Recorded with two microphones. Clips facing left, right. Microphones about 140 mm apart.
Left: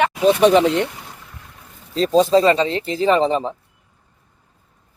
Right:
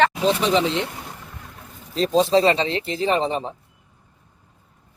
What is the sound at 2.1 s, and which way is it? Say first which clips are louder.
Speech: left 3 dB; 40° left (ahead or behind).